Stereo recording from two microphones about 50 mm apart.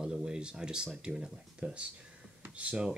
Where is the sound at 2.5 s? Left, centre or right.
Right.